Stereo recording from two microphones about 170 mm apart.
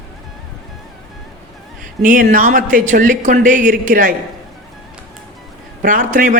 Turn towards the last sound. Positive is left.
turn(degrees=-50)  # may be behind; listen again after turning